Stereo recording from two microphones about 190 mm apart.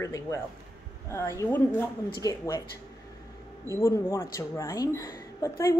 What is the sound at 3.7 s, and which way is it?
Speech, 15° left (ahead or behind).